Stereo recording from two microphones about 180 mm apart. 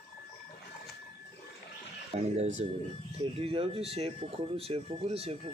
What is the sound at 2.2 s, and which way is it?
Speech, 35° right (ahead or behind).